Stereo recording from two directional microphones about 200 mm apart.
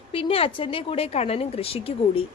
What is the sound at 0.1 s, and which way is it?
Speech, 25° left (ahead or behind).